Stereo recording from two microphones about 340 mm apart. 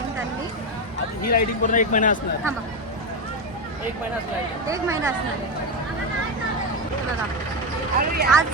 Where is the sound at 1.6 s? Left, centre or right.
Left.